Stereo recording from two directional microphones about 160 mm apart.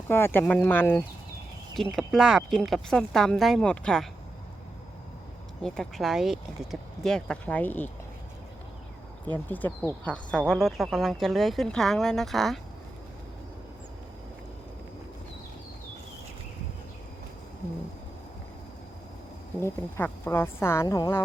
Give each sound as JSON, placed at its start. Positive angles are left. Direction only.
{"t": 0.1, "sound": "speech", "side_deg": 15}
{"t": 1.7, "sound": "speech", "side_deg": 0}
{"t": 5.6, "sound": "speech", "side_deg": 5}
{"t": 9.5, "sound": "speech", "side_deg": 10}
{"t": 19.6, "sound": "speech", "side_deg": 15}